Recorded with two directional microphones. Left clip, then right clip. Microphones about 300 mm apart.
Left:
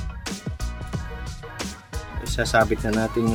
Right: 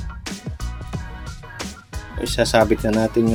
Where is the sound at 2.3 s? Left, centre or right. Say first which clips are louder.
Right 4 dB; centre.